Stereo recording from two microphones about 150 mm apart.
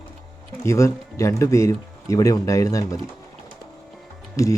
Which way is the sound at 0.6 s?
20° left (ahead or behind).